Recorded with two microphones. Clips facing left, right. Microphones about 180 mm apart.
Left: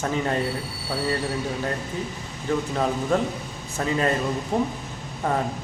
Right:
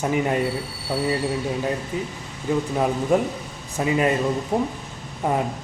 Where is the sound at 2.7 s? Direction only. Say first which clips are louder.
Right 4 dB; 10° right (ahead or behind).